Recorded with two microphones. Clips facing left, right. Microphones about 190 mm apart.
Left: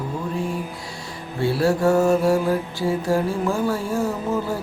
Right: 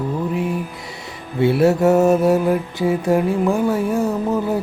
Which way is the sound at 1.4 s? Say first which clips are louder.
Right 5 dB; 20° right (ahead or behind).